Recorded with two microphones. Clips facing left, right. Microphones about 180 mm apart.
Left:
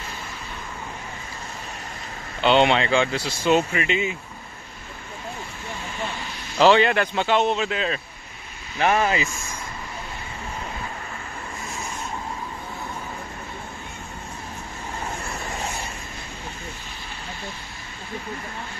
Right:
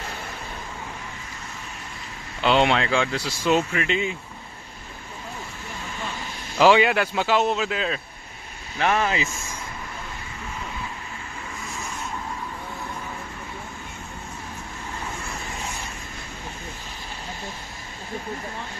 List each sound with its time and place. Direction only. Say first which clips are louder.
2.4 s speech: left 2 dB; centre (ahead or behind)
6.6 s speech: even; 10° right (ahead or behind)
8.9 s speech: left 2 dB; 45° left (ahead or behind)